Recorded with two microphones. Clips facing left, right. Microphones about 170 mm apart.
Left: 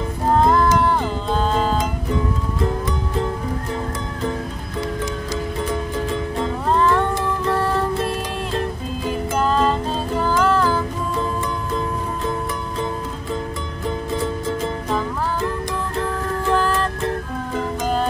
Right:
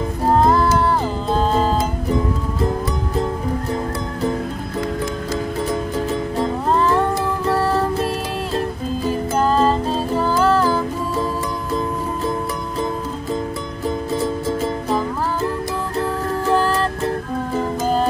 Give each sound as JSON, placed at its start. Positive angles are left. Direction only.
{"t": 0.4, "sound": "music", "side_deg": -5}
{"t": 6.4, "sound": "music", "side_deg": -10}
{"t": 7.5, "sound": "music", "side_deg": -35}
{"t": 9.0, "sound": "music", "side_deg": -35}
{"t": 10.6, "sound": "music", "side_deg": -10}
{"t": 13.8, "sound": "music", "side_deg": -10}
{"t": 16.5, "sound": "music", "side_deg": -35}